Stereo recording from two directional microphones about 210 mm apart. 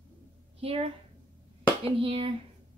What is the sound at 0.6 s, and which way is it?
Speech, 25° right (ahead or behind).